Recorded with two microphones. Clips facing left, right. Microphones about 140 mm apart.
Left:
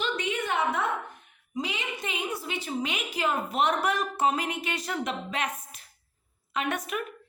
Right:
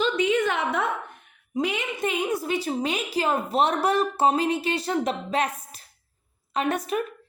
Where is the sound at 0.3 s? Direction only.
90° right.